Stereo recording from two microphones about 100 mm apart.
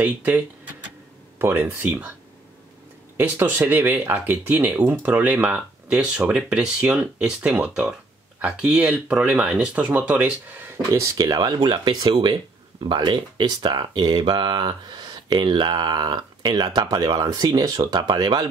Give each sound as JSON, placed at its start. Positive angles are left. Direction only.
{"t": 0.0, "sound": "speech", "side_deg": -15}
{"t": 1.4, "sound": "speech", "side_deg": -20}
{"t": 3.2, "sound": "speech", "side_deg": -20}
{"t": 10.9, "sound": "speech", "side_deg": -35}